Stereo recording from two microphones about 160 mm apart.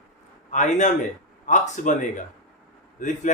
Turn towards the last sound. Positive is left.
turn(degrees=50)  # may be behind; listen again after turning